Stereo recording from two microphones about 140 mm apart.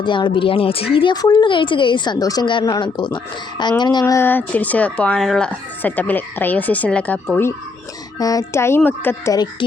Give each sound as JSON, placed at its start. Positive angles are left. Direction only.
{"t": 0.0, "sound": "speech", "side_deg": 35}
{"t": 4.0, "sound": "speech", "side_deg": 20}
{"t": 8.2, "sound": "speech", "side_deg": 25}
{"t": 9.3, "sound": "speech", "side_deg": 30}